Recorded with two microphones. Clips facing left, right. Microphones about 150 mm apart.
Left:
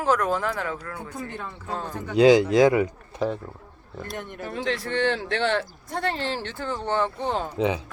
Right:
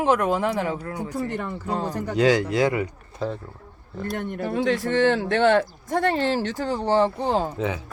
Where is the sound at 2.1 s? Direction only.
15° left (ahead or behind).